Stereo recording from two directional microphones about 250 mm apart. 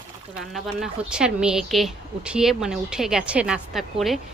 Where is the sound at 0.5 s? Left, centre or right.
Centre.